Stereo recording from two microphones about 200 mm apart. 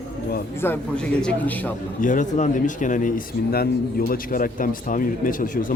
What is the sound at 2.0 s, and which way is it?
Speech, 40° left (ahead or behind).